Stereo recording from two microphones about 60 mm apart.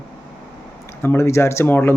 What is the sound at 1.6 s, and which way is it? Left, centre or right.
Speech, left.